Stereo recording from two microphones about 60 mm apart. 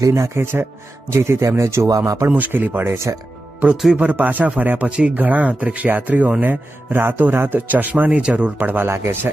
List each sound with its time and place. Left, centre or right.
0.1 s speech: right
1.1 s speech: right
2.3 s speech: right
3.6 s speech: right
8.5 s speech: right